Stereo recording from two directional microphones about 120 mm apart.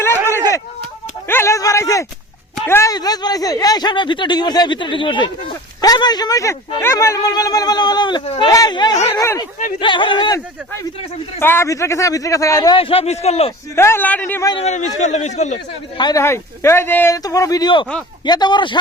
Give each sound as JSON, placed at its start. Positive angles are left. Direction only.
{"t": 0.0, "sound": "a sound", "side_deg": 20}
{"t": 2.9, "sound": "a man's voice", "side_deg": 35}
{"t": 9.8, "sound": "speech", "side_deg": 40}
{"t": 11.3, "sound": "a man's voice", "side_deg": 20}
{"t": 12.7, "sound": "speech", "side_deg": 50}
{"t": 13.7, "sound": "a man's voice", "side_deg": 20}
{"t": 14.6, "sound": "speech", "side_deg": 75}
{"t": 16.1, "sound": "a man's voice", "side_deg": 20}
{"t": 17.2, "sound": "speech", "side_deg": 30}